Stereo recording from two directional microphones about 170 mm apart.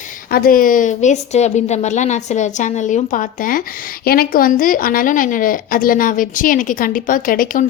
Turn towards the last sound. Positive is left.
turn(degrees=55)  # may be behind; listen again after turning